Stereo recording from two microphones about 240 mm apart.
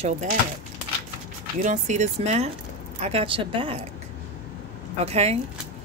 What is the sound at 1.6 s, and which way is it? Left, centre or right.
Speech, right.